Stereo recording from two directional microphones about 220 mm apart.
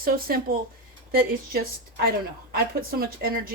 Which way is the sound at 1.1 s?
45° right (ahead or behind).